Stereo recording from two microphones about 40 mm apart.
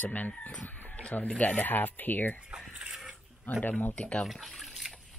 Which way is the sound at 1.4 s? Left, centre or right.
Left.